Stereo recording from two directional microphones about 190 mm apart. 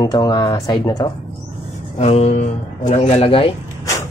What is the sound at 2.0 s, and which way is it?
Speech, 35° left (ahead or behind).